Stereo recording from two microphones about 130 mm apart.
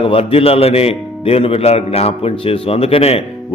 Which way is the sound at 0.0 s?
45° left (ahead or behind).